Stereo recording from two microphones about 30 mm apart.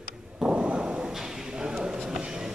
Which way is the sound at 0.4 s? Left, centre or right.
Right.